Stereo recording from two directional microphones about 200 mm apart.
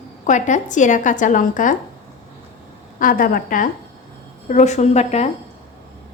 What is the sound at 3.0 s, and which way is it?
A woman's voice, 45° left (ahead or behind).